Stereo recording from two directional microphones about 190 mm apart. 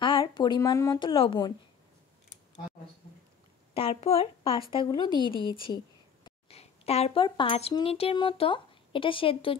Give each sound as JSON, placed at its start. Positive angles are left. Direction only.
{"t": 0.0, "sound": "speech", "side_deg": 25}
{"t": 3.7, "sound": "a woman's voice", "side_deg": 30}